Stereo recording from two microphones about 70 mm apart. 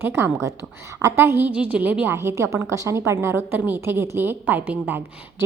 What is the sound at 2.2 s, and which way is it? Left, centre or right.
A woman's voice, right.